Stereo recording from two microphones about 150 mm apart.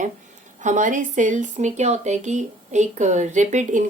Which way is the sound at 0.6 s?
55° right (ahead or behind).